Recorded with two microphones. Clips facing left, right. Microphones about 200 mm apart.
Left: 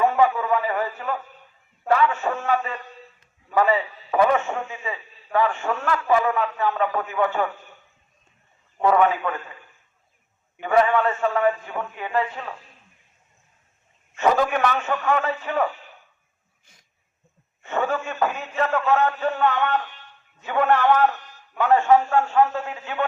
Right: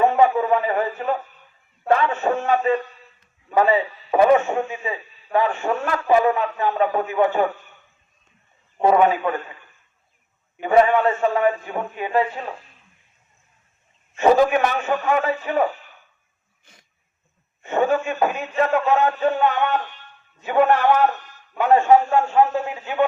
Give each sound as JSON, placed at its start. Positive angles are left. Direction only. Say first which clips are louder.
{"t": 0.0, "sound": "a man's voice", "louder": "right 3 dB", "side_deg": -25}
{"t": 8.8, "sound": "a man's voice", "louder": "right 2 dB", "side_deg": -20}
{"t": 10.6, "sound": "a man's voice", "louder": "right 3 dB", "side_deg": -20}
{"t": 14.3, "sound": "a man's voice", "louder": "right 4 dB", "side_deg": -15}
{"t": 17.6, "sound": "a man's voice", "louder": "right 5 dB", "side_deg": -15}